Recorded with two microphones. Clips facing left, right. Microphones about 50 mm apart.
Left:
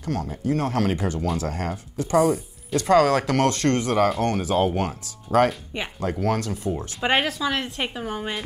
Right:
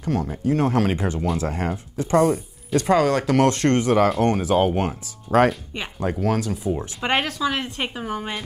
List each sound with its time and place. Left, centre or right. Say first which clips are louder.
0.0 s speech: right 3 dB; right
2.1 s speech: right 1 dB; centre
3.4 s speech: right 3 dB; right
5.5 s speech: right 1 dB; centre
5.9 s speech: right 2 dB; centre